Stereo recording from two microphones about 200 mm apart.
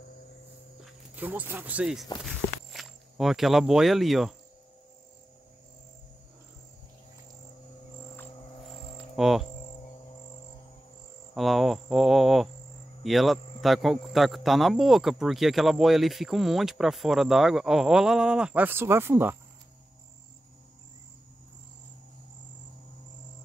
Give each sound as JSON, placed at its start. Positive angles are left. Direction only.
{"t": 1.1, "sound": "speech", "side_deg": -10}
{"t": 9.1, "sound": "cricket", "side_deg": 0}
{"t": 11.3, "sound": "speech", "side_deg": 0}